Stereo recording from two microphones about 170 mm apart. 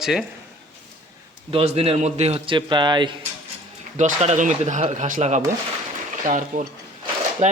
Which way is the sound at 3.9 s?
40° right (ahead or behind).